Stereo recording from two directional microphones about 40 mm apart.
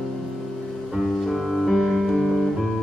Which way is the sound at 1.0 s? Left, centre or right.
Centre.